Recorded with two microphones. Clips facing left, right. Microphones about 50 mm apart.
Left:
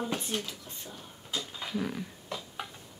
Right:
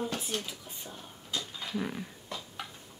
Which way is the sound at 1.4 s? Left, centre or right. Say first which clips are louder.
Left 1 dB; centre.